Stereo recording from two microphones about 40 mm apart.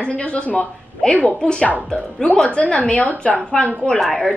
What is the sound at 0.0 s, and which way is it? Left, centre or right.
A woman's voice, left.